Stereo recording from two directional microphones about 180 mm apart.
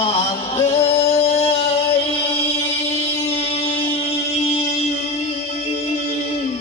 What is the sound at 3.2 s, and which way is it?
Music, 35° left (ahead or behind).